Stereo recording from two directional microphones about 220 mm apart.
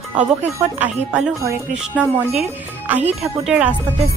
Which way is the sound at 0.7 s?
5° right (ahead or behind).